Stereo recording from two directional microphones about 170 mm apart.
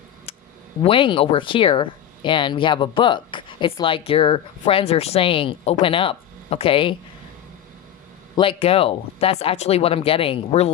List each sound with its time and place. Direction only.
0.8 s speech: 30° left (ahead or behind)
8.4 s speech: 35° left (ahead or behind)